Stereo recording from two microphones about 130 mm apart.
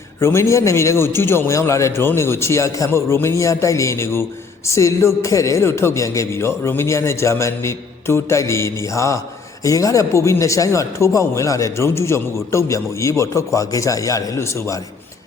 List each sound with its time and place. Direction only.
0.2 s speech: 20° left (ahead or behind)